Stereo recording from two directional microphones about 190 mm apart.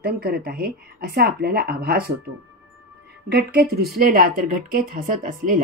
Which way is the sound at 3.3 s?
55° right (ahead or behind).